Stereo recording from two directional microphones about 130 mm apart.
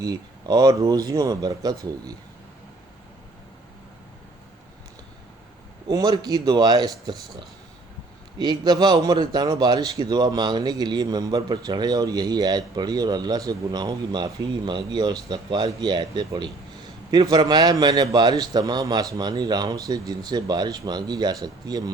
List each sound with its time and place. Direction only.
0.0 s a man's voice: 30° right (ahead or behind)
5.9 s a man's voice: 30° right (ahead or behind)